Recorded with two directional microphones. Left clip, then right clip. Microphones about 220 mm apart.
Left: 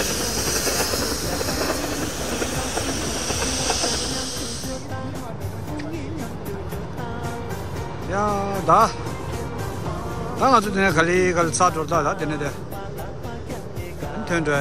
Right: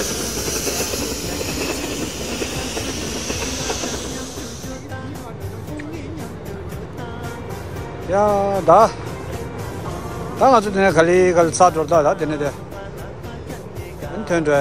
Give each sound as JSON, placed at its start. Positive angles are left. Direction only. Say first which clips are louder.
{"t": 0.0, "sound": "a sound", "louder": "even", "side_deg": -45}
{"t": 1.2, "sound": "train", "louder": "even", "side_deg": -50}
{"t": 8.1, "sound": "a man's voice", "louder": "right 7 dB", "side_deg": 10}
{"t": 10.4, "sound": "a man's voice", "louder": "right 4 dB", "side_deg": 10}
{"t": 14.2, "sound": "speech", "louder": "right 5 dB", "side_deg": 10}